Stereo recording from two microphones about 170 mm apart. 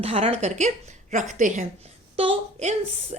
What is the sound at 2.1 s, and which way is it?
Speech, 35° right (ahead or behind).